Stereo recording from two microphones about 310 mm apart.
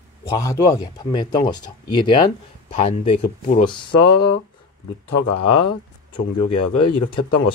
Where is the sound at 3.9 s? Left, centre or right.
Left.